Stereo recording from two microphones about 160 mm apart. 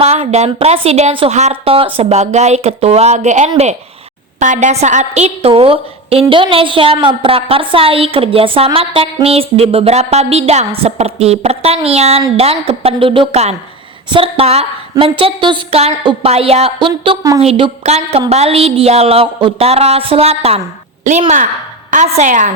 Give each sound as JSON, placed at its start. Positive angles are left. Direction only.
{"t": 0.0, "sound": "a woman's voice", "side_deg": -40}